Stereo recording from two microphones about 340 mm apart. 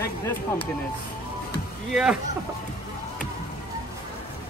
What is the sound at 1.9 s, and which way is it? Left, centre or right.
Speech, centre.